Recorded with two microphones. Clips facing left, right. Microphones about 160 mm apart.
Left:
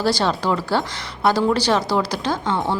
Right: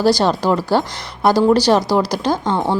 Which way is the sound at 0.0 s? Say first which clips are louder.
Right 5 dB; 40° right (ahead or behind).